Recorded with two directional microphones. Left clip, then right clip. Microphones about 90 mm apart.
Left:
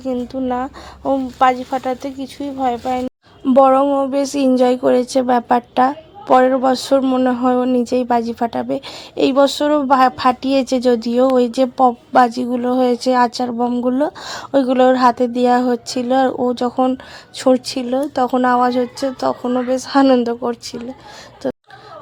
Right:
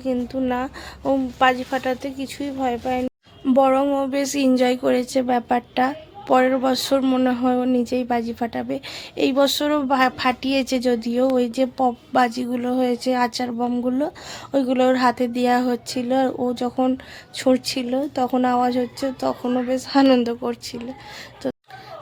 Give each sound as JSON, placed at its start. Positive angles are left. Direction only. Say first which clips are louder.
{"t": 0.0, "sound": "a woman's voice", "louder": "left 2 dB", "side_deg": 15}
{"t": 3.4, "sound": "speech", "louder": "left 6 dB", "side_deg": 45}
{"t": 3.8, "sound": "a woman's voice", "louder": "left 5 dB", "side_deg": 30}
{"t": 13.6, "sound": "a woman's voice", "louder": "left 6 dB", "side_deg": 30}
{"t": 21.4, "sound": "a sound", "louder": "left 5 dB", "side_deg": 30}